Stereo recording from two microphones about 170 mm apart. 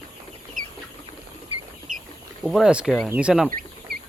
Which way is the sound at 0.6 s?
50° right (ahead or behind).